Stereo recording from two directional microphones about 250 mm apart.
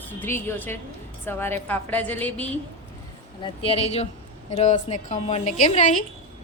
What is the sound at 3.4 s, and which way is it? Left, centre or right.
A woman's voice, left.